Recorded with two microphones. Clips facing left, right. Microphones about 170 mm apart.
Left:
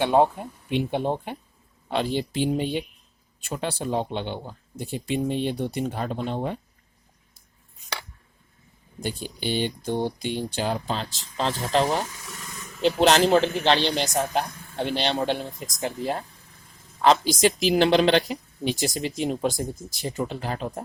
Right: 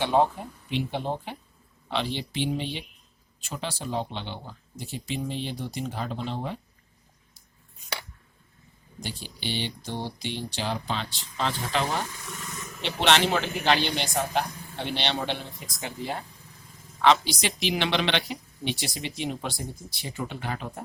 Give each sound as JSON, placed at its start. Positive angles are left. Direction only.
{"t": 0.7, "sound": "speech", "side_deg": 50}
{"t": 9.0, "sound": "speech", "side_deg": 50}
{"t": 12.8, "sound": "speech", "side_deg": 40}